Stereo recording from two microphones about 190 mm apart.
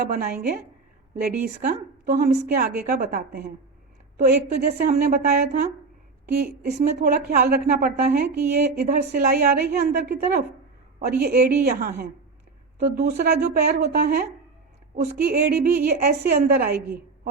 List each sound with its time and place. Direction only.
0.0 s a woman's voice: 55° right (ahead or behind); by 2.3 s 40° right (ahead or behind)
2.3 s a woman's voice: 55° right (ahead or behind)
6.2 s a woman's voice: 55° right (ahead or behind)
6.7 s a woman's voice: 40° right (ahead or behind)
7.3 s a woman's voice: 55° right (ahead or behind)